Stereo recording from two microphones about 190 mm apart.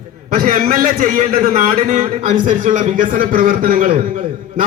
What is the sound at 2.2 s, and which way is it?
A man's voice, 40° right (ahead or behind).